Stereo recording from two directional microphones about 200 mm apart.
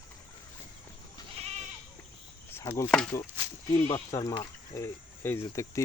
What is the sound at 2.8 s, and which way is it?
Speech, 5° left (ahead or behind).